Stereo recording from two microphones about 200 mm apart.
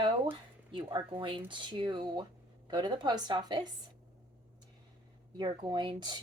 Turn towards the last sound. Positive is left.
turn(degrees=-20)  # may be behind; listen again after turning